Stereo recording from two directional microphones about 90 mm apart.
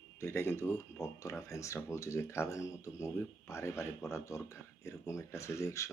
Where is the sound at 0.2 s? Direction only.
25° left (ahead or behind).